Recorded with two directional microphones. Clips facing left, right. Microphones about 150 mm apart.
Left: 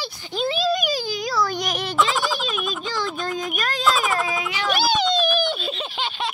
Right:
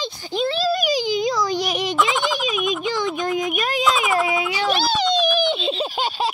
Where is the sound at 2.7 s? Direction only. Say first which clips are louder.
Right 5 dB; 20° right (ahead or behind).